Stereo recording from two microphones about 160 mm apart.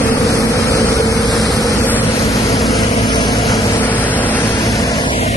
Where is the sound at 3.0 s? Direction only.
30° left (ahead or behind).